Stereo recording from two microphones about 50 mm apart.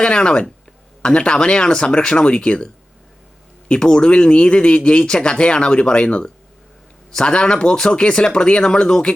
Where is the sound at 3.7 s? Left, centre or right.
Centre.